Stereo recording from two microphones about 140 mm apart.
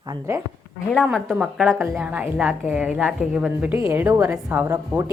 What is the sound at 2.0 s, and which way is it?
A woman's voice, 10° right (ahead or behind).